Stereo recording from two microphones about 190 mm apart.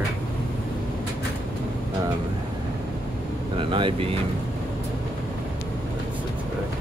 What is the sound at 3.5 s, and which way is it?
Speech, 25° right (ahead or behind).